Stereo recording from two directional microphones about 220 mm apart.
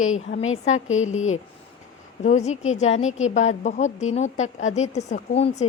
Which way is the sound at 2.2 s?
30° left (ahead or behind).